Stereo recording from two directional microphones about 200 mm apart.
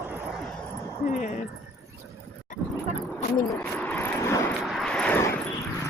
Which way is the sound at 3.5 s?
10° left (ahead or behind).